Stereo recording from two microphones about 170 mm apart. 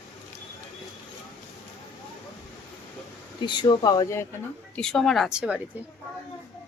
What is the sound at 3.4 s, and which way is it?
Speech, 25° left (ahead or behind).